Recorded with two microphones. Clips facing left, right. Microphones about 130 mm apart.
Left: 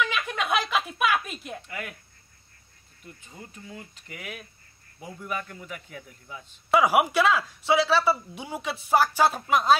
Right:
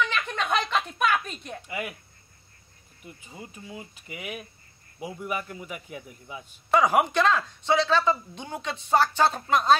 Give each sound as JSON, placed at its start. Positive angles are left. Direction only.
{"t": 0.0, "sound": "a sound", "side_deg": 5}
{"t": 1.7, "sound": "speech", "side_deg": -10}
{"t": 3.0, "sound": "a man's voice", "side_deg": -10}
{"t": 6.7, "sound": "speech", "side_deg": 10}